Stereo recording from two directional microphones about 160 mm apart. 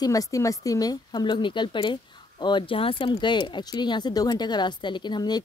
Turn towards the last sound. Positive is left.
turn(degrees=25)  # may be behind; listen again after turning